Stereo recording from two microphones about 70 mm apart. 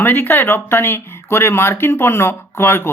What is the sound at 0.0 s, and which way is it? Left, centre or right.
Speech, left.